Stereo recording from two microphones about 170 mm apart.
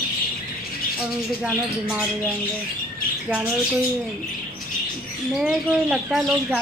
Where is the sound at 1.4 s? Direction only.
5° right (ahead or behind).